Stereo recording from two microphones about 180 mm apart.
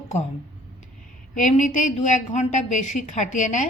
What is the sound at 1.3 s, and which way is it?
A woman's voice, 45° left (ahead or behind).